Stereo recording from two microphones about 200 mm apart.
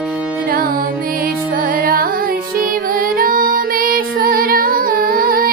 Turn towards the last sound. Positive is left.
turn(degrees=-45)  # may be behind; listen again after turning